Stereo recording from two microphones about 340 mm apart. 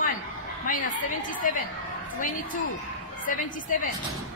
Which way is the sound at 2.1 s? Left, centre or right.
Left.